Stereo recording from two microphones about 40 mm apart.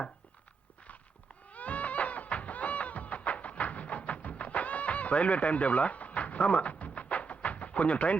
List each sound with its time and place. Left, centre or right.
1.5 s music: left